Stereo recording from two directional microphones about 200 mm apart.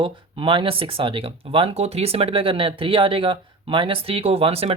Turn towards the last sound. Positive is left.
turn(degrees=-30)  # may be behind; listen again after turning